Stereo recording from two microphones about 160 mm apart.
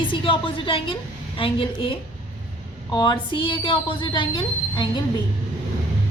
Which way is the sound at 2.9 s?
30° left (ahead or behind).